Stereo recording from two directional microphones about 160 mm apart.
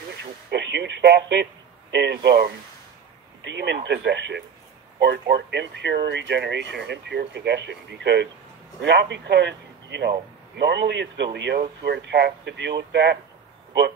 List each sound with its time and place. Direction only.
0.2 s speech: 90° right